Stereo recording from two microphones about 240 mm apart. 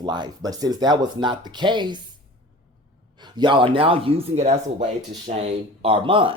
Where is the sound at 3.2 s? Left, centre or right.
Centre.